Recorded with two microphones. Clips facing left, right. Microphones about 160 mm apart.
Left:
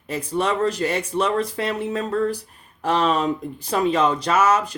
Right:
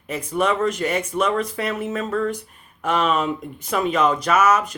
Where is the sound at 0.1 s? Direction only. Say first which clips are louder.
Right 1 dB; 30° left (ahead or behind).